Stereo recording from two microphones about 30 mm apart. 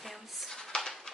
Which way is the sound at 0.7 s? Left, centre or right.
Left.